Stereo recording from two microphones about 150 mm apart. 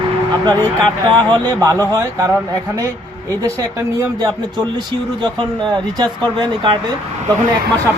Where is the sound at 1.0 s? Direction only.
30° right (ahead or behind).